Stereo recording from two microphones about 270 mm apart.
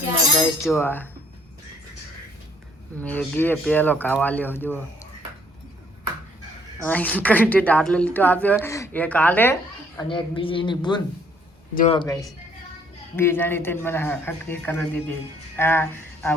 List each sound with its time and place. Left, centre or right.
0.7 s a man's voice: centre
3.0 s a man's voice: centre
6.7 s a man's voice: centre
10.0 s a man's voice: centre